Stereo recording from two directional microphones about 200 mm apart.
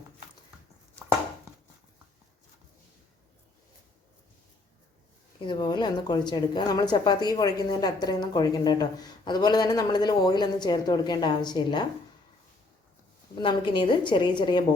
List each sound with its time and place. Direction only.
5.5 s a woman's voice: 20° left (ahead or behind)
13.4 s a woman's voice: 25° left (ahead or behind)